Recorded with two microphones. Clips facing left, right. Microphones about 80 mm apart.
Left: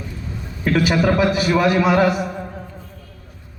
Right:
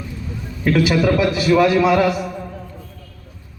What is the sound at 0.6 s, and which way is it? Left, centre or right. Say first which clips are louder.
A man's voice: right 1 dB; left.